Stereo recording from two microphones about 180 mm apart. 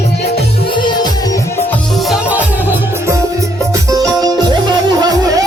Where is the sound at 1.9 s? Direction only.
Centre (ahead or behind); by 5.4 s 20° right (ahead or behind).